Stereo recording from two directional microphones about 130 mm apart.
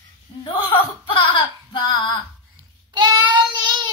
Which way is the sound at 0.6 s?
40° left (ahead or behind).